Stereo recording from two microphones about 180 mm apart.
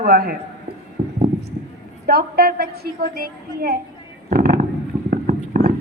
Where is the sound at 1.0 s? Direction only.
40° right (ahead or behind).